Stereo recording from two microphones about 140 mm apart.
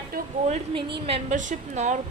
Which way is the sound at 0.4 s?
50° right (ahead or behind).